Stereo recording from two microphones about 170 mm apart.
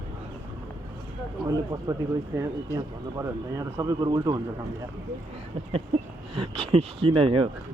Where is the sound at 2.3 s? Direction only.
15° right (ahead or behind).